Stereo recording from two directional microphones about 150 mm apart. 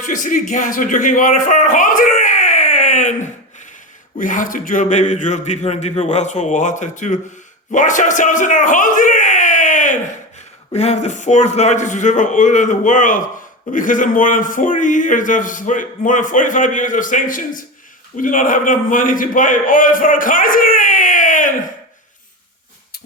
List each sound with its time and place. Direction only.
0.0 s speech: 60° left (ahead or behind)
4.2 s a man's voice: 60° left (ahead or behind)
7.7 s a sound: 55° left (ahead or behind)
10.7 s a man's voice: 45° left (ahead or behind)